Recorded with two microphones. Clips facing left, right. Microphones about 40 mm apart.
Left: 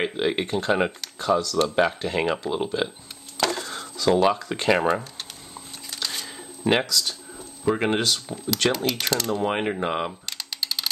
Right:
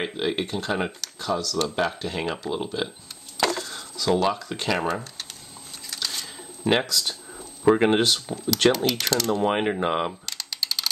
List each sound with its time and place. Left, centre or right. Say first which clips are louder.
0.0 s speech: left 2 dB; centre
1.6 s speech: left 4 dB; centre
3.6 s speech: left 3 dB; centre
5.9 s shuffling cards: even; centre
6.9 s speech: left 1 dB; centre
8.6 s speech: right 3 dB; centre
9.3 s speech: right 3 dB; centre
10.2 s typing: even; centre